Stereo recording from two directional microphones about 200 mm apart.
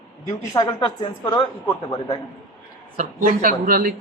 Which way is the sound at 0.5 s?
20° left (ahead or behind).